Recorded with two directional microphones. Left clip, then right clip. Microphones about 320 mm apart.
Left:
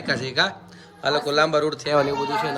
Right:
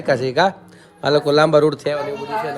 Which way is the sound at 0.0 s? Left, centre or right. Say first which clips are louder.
Right 6 dB; centre.